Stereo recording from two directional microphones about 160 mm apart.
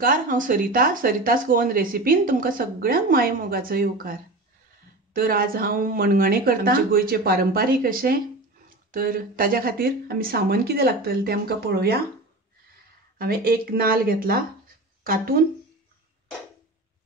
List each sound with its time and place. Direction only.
0.0 s speech: 55° right (ahead or behind)
5.1 s speech: 65° right (ahead or behind)
13.2 s speech: 70° right (ahead or behind)